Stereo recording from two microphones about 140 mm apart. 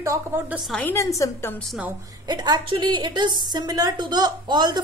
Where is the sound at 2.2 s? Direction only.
30° right (ahead or behind).